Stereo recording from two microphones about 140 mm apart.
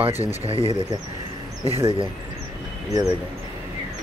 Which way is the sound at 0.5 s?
40° right (ahead or behind).